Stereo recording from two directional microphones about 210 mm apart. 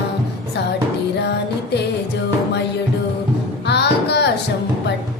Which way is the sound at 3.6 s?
55° left (ahead or behind).